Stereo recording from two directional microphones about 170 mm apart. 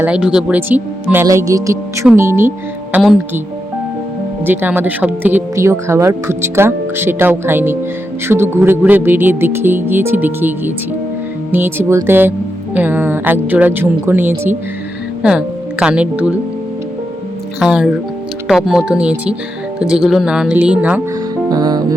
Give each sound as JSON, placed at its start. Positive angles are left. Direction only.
{"t": 0.0, "sound": "speech", "side_deg": -5}
{"t": 2.9, "sound": "speech", "side_deg": 0}
{"t": 4.4, "sound": "speech", "side_deg": -10}
{"t": 11.5, "sound": "speech", "side_deg": -10}
{"t": 17.6, "sound": "speech", "side_deg": -5}
{"t": 21.5, "sound": "music", "side_deg": -25}